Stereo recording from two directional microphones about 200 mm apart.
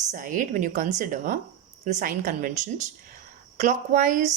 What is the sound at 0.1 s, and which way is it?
A woman's voice, 40° right (ahead or behind).